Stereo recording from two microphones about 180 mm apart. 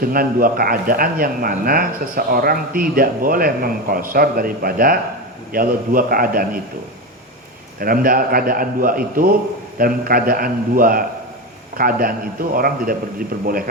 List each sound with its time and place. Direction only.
0.0 s speech: 55° right (ahead or behind)
7.8 s speech: 50° right (ahead or behind)